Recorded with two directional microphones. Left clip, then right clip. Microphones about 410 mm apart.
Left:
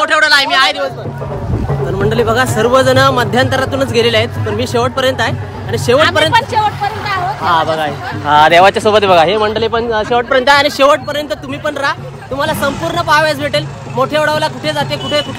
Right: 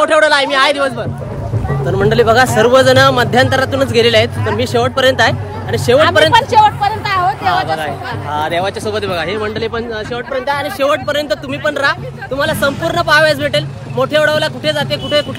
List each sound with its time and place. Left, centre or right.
0.0 s a man's voice: centre
2.0 s speech: centre
6.3 s speech: right
7.4 s speech: centre
8.3 s speech: centre
11.1 s speech: centre